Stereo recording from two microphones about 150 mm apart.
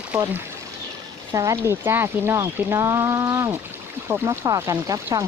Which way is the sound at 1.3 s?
20° right (ahead or behind).